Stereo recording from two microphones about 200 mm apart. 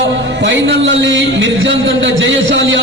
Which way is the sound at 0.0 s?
60° right (ahead or behind).